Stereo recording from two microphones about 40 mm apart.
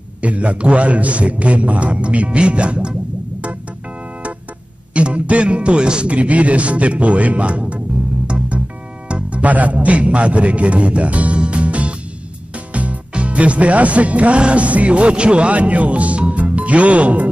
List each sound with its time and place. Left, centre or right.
0.2 s speech: right
4.9 s speech: right
8.3 s music: right
9.1 s a man's voice: right